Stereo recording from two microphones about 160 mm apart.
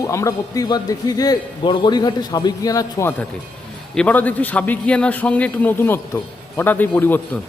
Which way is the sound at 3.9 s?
5° left (ahead or behind).